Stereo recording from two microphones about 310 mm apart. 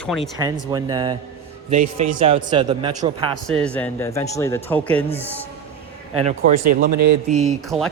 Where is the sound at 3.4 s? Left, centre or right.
Centre.